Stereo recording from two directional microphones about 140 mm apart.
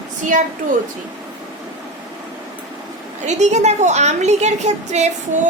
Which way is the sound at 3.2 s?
55° right (ahead or behind).